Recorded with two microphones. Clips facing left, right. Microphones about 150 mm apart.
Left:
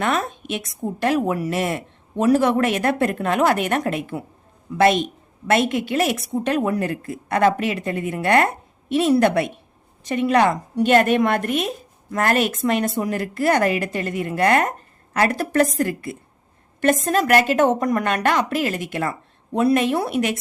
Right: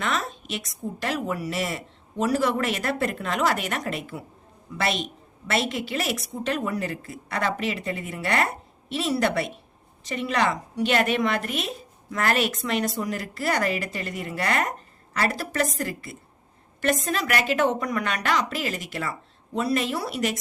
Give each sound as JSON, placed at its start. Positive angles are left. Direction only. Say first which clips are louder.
{"t": 0.0, "sound": "a woman's voice", "louder": "left 6 dB", "side_deg": 50}